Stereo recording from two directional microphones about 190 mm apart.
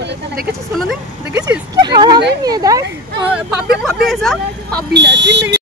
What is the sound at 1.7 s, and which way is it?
Speech, 20° right (ahead or behind).